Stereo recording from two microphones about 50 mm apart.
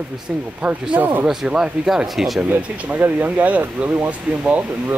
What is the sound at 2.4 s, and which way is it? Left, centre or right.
Speech, right.